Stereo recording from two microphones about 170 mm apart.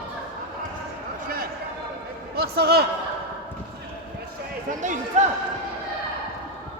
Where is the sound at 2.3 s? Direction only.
70° right (ahead or behind).